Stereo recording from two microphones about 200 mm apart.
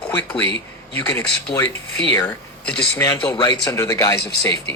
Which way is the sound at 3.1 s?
20° left (ahead or behind).